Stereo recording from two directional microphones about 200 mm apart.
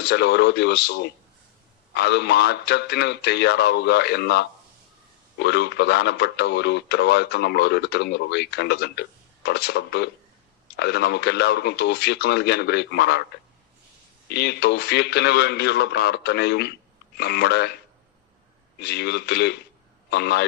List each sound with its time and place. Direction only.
0.0 s speech: 55° left (ahead or behind)
14.3 s speech: 55° left (ahead or behind)
18.8 s a man's voice: 55° left (ahead or behind)